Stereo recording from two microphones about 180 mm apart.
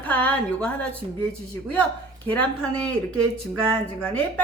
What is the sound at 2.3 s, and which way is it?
Speech, 10° left (ahead or behind).